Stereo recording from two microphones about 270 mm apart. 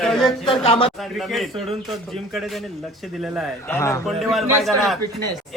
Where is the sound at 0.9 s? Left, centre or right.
Centre.